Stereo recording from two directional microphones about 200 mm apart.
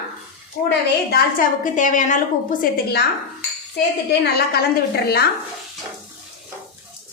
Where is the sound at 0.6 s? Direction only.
50° left (ahead or behind).